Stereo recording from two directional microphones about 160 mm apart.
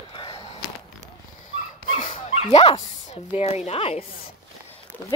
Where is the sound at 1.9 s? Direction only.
50° left (ahead or behind).